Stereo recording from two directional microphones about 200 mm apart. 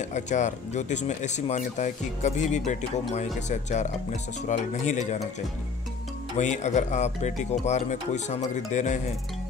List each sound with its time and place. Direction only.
0.0 s speech: 35° left (ahead or behind)
6.3 s speech: 35° left (ahead or behind)